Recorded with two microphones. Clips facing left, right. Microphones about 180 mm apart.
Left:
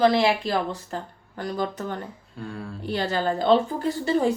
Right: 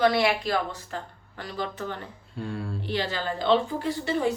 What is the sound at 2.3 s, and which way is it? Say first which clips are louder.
Speech: right 3 dB; centre (ahead or behind).